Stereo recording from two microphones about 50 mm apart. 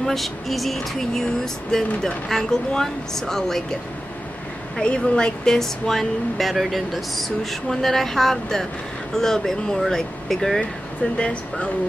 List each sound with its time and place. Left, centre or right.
0.0 s speech: centre
4.7 s speech: centre
11.1 s speech: left